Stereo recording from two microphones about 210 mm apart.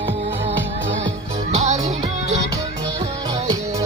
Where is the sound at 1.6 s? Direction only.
35° right (ahead or behind).